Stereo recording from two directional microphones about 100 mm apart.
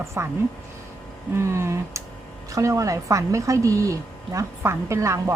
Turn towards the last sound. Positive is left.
turn(degrees=-30)  # may be behind; listen again after turning